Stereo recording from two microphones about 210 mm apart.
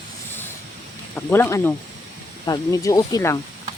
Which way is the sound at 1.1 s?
10° left (ahead or behind).